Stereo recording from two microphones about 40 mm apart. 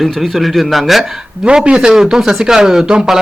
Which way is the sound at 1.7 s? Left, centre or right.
Centre.